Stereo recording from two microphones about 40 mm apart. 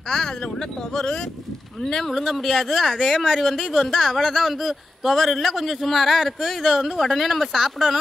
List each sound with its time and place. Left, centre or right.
0.1 s speech: centre
2.0 s speech: centre